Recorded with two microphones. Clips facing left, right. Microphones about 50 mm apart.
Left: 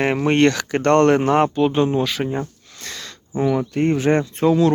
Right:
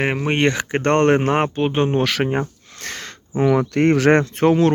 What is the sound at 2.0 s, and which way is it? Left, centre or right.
Speech, right.